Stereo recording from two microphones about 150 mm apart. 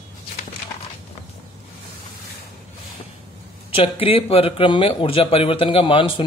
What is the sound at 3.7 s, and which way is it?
A man's voice, 40° left (ahead or behind).